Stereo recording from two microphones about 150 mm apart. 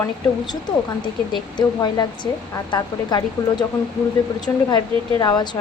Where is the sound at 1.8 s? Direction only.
25° left (ahead or behind).